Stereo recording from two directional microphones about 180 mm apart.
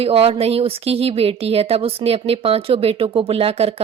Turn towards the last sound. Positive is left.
turn(degrees=-35)  # may be behind; listen again after turning